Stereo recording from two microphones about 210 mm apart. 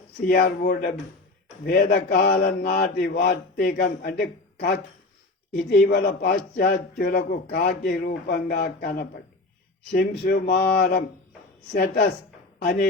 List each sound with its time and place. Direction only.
0.3 s speech: 45° left (ahead or behind)